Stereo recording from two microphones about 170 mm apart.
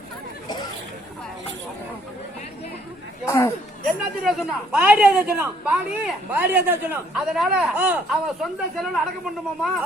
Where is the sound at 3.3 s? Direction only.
15° left (ahead or behind).